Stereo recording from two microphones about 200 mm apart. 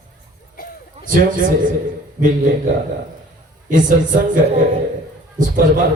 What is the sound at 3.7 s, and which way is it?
Speech, 40° right (ahead or behind).